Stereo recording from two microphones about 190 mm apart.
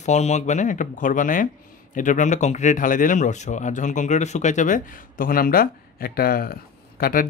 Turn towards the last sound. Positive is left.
turn(degrees=50)  # may be behind; listen again after turning